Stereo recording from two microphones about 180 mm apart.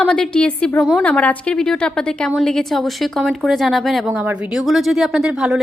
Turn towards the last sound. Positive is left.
turn(degrees=-5)  # may be behind; listen again after turning